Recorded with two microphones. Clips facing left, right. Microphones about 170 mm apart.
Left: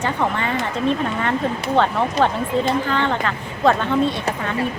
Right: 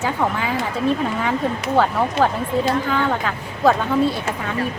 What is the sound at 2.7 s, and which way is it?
Speech, 5° right (ahead or behind).